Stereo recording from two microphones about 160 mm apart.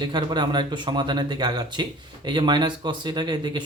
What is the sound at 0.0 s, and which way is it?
Speech, 30° right (ahead or behind).